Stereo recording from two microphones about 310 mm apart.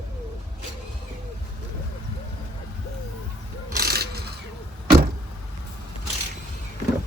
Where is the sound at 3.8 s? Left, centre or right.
Right.